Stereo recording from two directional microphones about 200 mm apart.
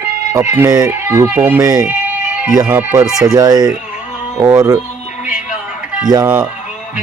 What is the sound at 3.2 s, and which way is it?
Speech, 20° right (ahead or behind).